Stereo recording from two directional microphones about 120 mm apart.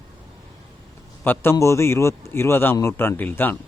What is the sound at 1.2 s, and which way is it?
A man's voice, 20° left (ahead or behind).